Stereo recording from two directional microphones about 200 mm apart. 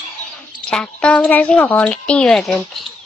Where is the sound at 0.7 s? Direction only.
5° left (ahead or behind).